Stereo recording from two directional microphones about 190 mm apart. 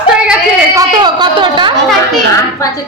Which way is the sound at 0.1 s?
5° right (ahead or behind).